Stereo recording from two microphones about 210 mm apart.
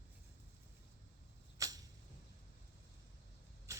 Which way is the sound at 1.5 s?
15° right (ahead or behind).